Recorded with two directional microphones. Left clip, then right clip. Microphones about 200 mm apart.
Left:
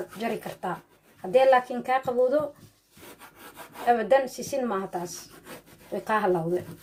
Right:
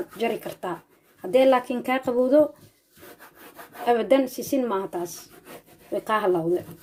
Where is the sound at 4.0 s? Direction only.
45° right (ahead or behind).